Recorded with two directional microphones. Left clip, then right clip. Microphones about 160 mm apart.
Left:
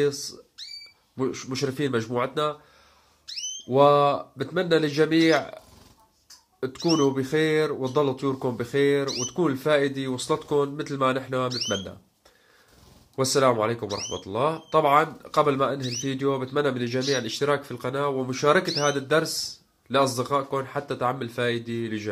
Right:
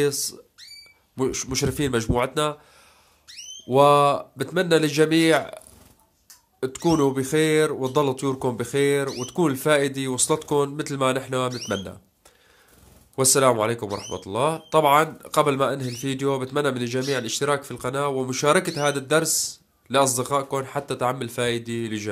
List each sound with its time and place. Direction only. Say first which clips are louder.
0.0 s speech: right 2 dB; 35° right (ahead or behind)
3.6 s speech: right 2 dB; 35° right (ahead or behind)
6.6 s speech: right 2 dB; 30° right (ahead or behind)
13.1 s speech: right 2 dB; 35° right (ahead or behind)